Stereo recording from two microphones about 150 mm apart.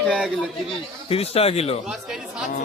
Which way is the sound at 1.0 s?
40° left (ahead or behind).